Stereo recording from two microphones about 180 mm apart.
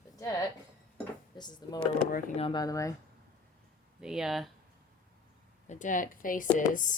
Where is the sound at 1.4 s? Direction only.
25° left (ahead or behind).